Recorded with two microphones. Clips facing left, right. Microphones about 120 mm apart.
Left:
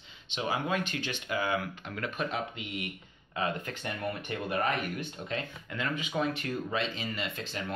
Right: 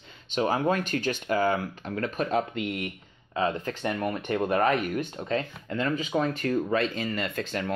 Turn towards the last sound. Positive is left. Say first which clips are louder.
# right 6 dB
turn(degrees=-50)  # may be behind; listen again after turning